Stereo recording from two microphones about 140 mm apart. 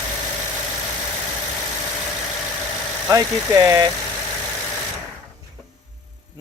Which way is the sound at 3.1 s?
25° right (ahead or behind).